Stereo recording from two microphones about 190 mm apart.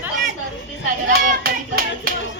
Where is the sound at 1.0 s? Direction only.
50° right (ahead or behind).